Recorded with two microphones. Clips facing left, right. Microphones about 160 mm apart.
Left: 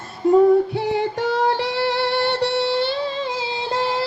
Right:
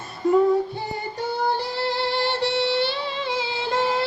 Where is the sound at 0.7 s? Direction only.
85° left; by 3.8 s 35° left (ahead or behind).